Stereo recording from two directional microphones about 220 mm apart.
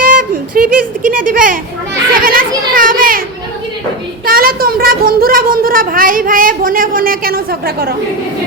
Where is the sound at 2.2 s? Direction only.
40° right (ahead or behind).